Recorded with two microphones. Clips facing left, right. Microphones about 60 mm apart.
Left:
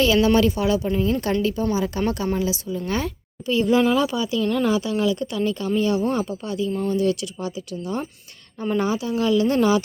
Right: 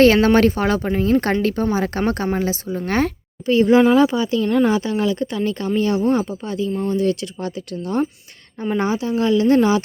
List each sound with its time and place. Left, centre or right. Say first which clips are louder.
0.0 s a woman's voice: right 5 dB; right
3.4 s speech: right 5 dB; right
7.4 s a woman's voice: right 3 dB; right
8.8 s speech: right 4 dB; right